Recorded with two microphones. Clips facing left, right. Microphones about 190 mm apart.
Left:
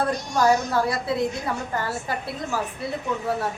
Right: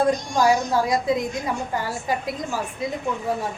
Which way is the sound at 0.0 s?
10° right (ahead or behind).